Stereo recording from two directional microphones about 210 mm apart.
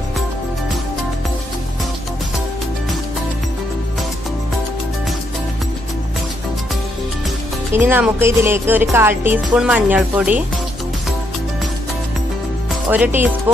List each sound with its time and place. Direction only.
7.7 s speech: 10° right (ahead or behind)
12.9 s speech: 10° right (ahead or behind)